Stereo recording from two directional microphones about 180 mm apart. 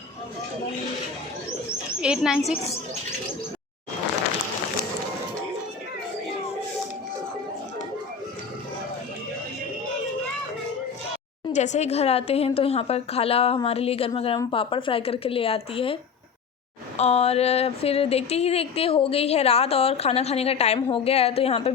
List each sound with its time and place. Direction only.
2.0 s speech: 5° right (ahead or behind)
11.5 s speech: 40° left (ahead or behind)
17.0 s speech: 35° left (ahead or behind)